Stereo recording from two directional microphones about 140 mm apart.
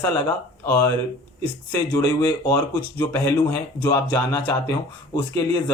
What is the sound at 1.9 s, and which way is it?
Speech, 25° left (ahead or behind).